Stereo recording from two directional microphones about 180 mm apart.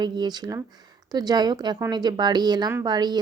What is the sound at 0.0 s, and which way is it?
Speech, 25° right (ahead or behind).